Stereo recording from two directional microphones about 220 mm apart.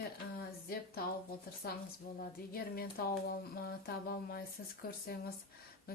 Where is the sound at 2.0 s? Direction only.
40° left (ahead or behind).